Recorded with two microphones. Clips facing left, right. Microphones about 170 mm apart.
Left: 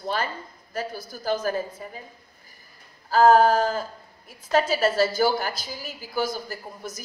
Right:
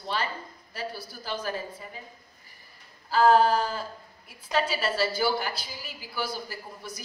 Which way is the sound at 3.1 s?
45° left (ahead or behind).